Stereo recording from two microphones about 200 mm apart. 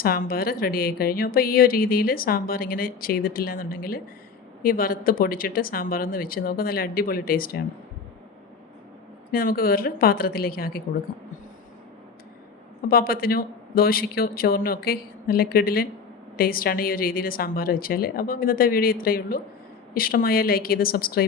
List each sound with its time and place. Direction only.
0.0 s a woman's voice: 45° left (ahead or behind)
9.3 s a woman's voice: 45° left (ahead or behind)
12.9 s a woman's voice: 50° left (ahead or behind)